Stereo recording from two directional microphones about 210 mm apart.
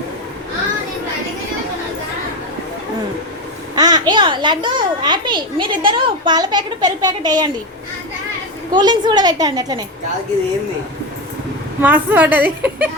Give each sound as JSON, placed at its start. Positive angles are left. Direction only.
{"t": 3.8, "sound": "a child's voice", "side_deg": -20}
{"t": 8.7, "sound": "a child's voice", "side_deg": -20}
{"t": 11.8, "sound": "a woman's voice", "side_deg": -5}